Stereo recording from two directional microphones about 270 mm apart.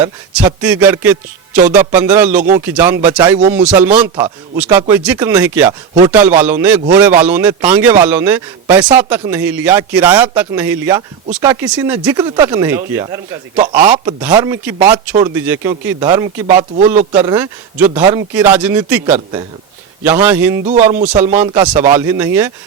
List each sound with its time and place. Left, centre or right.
0.0 s a man's voice: centre
16.5 s speech: right
17.2 s speech: centre
20.7 s speech: right
21.3 s speech: centre